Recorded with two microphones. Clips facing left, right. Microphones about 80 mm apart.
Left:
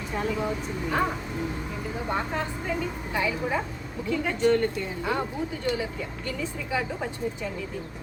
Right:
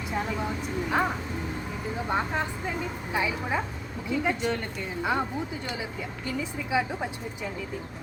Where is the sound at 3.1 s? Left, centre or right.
Centre.